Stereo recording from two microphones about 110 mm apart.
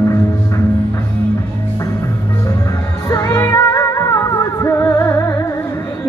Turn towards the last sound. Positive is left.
turn(degrees=25)  # may be behind; listen again after turning